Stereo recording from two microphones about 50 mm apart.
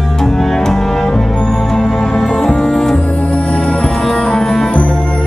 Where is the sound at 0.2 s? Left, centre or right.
Centre.